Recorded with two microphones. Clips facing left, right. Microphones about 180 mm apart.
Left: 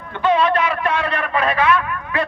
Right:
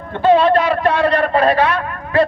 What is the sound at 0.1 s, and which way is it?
A man's voice, 35° right (ahead or behind).